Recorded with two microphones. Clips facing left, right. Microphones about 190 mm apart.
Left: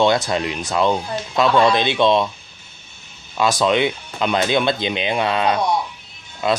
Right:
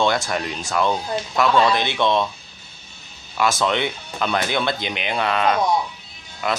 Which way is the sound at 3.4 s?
15° left (ahead or behind).